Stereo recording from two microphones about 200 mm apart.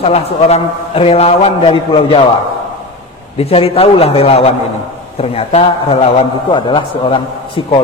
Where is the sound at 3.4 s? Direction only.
30° left (ahead or behind).